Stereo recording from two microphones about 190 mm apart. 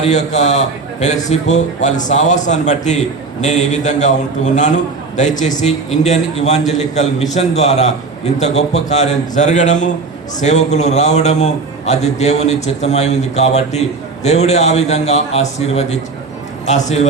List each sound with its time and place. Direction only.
0.0 s a man's voice: 40° left (ahead or behind)